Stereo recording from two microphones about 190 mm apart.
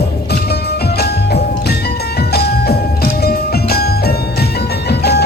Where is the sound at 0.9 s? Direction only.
55° left (ahead or behind).